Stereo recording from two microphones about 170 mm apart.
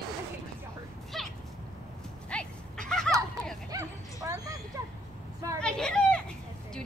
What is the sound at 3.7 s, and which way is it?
Bow-wow, 20° right (ahead or behind).